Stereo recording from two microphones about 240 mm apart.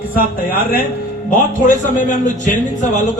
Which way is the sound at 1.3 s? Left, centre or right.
Left.